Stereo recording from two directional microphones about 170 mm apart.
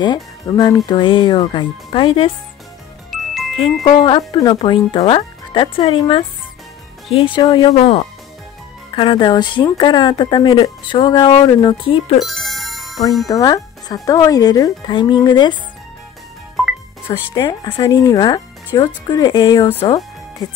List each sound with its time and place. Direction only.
0.0 s a woman's voice: 25° left (ahead or behind)
3.1 s music: centre (ahead or behind)
3.8 s a woman's voice: 30° left (ahead or behind)
7.3 s a woman's voice: 25° left (ahead or behind)
12.2 s music: centre (ahead or behind)
13.3 s a woman's voice: 25° left (ahead or behind)
17.3 s a woman's voice: 25° left (ahead or behind)